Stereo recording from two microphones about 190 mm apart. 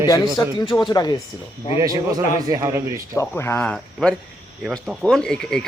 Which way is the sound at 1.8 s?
20° right (ahead or behind).